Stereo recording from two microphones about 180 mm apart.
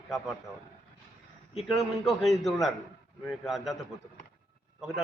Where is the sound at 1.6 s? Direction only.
Centre (ahead or behind).